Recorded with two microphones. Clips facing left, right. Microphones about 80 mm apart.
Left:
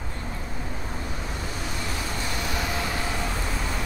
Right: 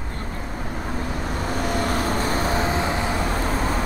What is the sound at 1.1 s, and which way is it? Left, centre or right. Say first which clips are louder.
Vehicle: right 7 dB; right.